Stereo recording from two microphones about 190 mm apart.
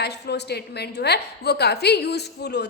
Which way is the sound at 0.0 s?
60° left (ahead or behind).